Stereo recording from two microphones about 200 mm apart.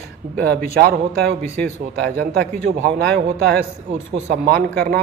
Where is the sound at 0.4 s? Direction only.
50° right (ahead or behind).